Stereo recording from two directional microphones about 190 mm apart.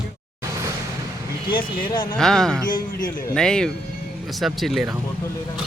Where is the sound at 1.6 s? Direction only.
25° left (ahead or behind).